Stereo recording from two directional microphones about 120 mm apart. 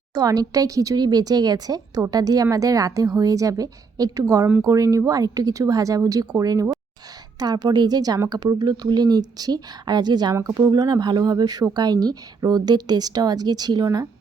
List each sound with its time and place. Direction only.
0.1 s speech: 35° right (ahead or behind)
10.3 s speech: 25° right (ahead or behind)